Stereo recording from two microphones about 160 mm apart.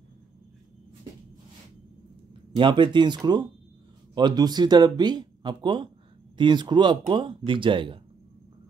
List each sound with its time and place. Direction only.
2.5 s speech: 30° right (ahead or behind)